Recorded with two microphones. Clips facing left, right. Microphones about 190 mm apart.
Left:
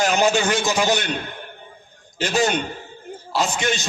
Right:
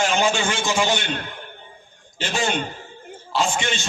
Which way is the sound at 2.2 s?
40° left (ahead or behind).